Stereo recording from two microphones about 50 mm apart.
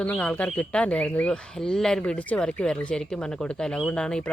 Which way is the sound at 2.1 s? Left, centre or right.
Left.